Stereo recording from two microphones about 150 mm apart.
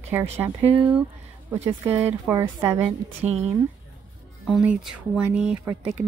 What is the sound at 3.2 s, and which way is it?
Speech, 45° right (ahead or behind).